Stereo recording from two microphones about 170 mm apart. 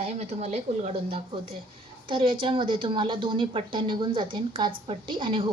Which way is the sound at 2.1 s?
30° right (ahead or behind).